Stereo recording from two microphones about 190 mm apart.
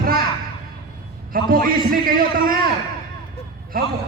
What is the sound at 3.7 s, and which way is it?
Speech, 50° right (ahead or behind).